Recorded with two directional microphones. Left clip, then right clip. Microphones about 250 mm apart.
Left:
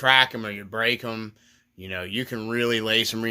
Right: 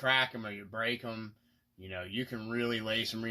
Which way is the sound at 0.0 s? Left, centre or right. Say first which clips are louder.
Left 11 dB; left.